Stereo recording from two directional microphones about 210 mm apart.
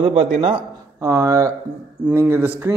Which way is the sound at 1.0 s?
15° right (ahead or behind).